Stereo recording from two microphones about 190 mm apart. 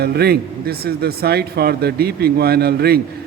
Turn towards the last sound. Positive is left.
turn(degrees=-55)  # may be behind; listen again after turning